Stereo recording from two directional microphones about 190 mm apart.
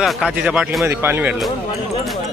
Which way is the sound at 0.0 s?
Centre (ahead or behind).